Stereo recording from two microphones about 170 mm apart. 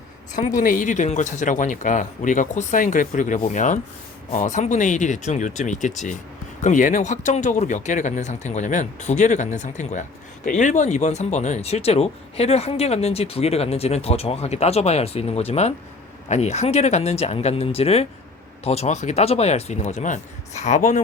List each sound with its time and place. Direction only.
0.3 s speech: 50° left (ahead or behind)